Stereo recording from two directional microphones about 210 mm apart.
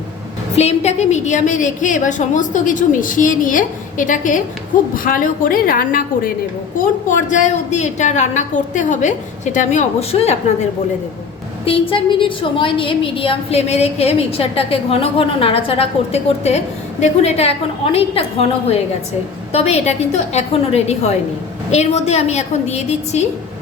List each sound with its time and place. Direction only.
0.5 s a woman's voice: 30° left (ahead or behind)